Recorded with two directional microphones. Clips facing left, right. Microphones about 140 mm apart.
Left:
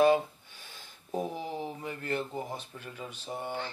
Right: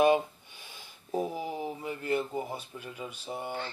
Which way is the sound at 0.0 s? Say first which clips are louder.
Even; 15° right (ahead or behind).